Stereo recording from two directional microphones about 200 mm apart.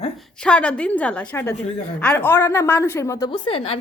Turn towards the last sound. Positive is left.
turn(degrees=30)  # may be behind; listen again after turning